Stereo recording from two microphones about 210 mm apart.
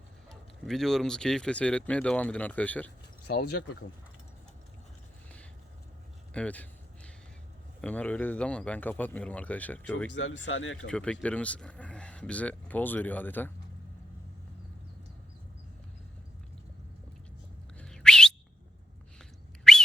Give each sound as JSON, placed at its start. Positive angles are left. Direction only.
{"t": 0.3, "sound": "speech", "side_deg": 0}
{"t": 3.2, "sound": "speech", "side_deg": 50}
{"t": 6.3, "sound": "a sound", "side_deg": 5}
{"t": 7.8, "sound": "speech", "side_deg": 5}
{"t": 10.1, "sound": "speech", "side_deg": 60}
{"t": 10.8, "sound": "speech", "side_deg": 5}
{"t": 17.7, "sound": "whistle", "side_deg": 5}